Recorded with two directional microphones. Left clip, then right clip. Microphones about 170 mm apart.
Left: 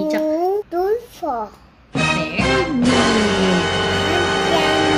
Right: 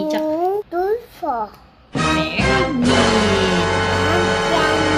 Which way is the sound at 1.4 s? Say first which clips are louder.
Right 1 dB; centre (ahead or behind).